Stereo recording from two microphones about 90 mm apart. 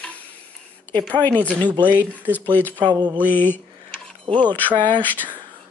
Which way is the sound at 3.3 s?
20° left (ahead or behind).